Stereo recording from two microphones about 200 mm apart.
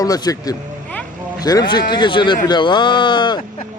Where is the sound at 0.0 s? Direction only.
20° left (ahead or behind).